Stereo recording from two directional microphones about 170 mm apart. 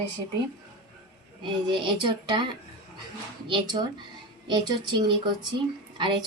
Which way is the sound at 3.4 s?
30° right (ahead or behind).